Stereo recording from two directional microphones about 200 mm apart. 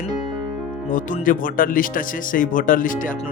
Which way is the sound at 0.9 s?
40° left (ahead or behind).